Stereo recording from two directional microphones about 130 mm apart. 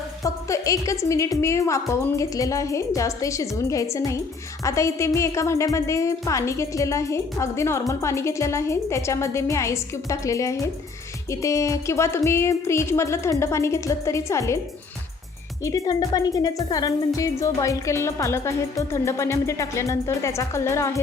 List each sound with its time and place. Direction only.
0.2 s a woman's voice: 25° left (ahead or behind)
15.6 s a woman's voice: 25° left (ahead or behind)